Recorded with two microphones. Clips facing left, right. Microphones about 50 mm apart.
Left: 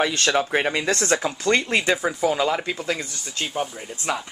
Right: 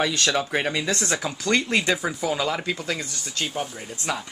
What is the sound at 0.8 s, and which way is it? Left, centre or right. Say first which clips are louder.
Speech: left 3 dB; left.